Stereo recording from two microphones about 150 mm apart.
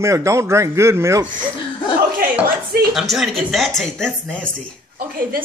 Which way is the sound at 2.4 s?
75° right (ahead or behind).